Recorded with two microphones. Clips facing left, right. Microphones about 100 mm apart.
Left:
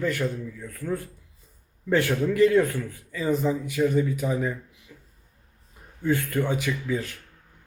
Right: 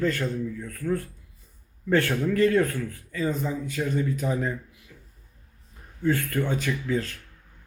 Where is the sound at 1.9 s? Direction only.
15° left (ahead or behind).